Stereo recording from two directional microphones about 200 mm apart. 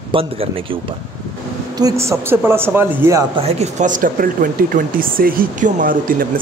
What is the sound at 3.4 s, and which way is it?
Speech, 35° right (ahead or behind).